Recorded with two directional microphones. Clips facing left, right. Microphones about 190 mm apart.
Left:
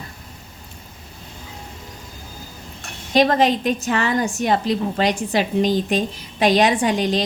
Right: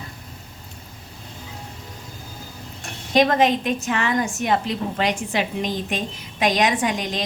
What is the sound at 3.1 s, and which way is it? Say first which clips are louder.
A woman's voice: left 1 dB; 35° left (ahead or behind).